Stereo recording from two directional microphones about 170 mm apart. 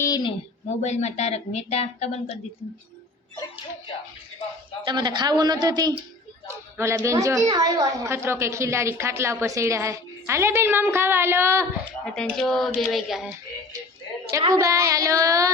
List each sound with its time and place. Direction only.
0.0 s speech: 25° left (ahead or behind)
0.8 s speech: 40° left (ahead or behind)
4.9 s child singing: 25° right (ahead or behind)
6.7 s a woman's voice: 15° right (ahead or behind)
12.0 s speech: 5° left (ahead or behind)
14.5 s child singing: 20° right (ahead or behind)